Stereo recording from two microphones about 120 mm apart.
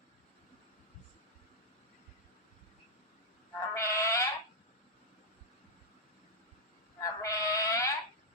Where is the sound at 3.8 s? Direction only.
25° left (ahead or behind).